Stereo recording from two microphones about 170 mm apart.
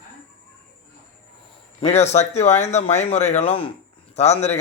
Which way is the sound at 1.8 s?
40° left (ahead or behind).